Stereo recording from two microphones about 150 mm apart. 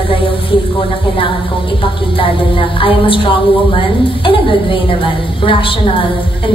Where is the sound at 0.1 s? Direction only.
35° left (ahead or behind).